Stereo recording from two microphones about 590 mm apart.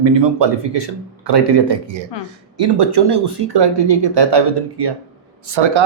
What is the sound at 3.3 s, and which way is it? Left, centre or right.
Speech, right.